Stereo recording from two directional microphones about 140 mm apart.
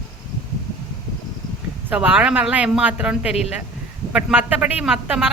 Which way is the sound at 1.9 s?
10° right (ahead or behind).